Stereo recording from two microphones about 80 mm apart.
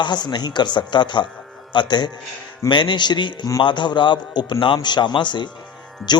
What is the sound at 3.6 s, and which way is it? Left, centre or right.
A man's voice, left.